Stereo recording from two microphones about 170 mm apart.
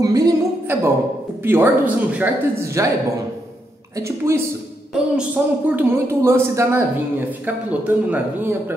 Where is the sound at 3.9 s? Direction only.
15° right (ahead or behind).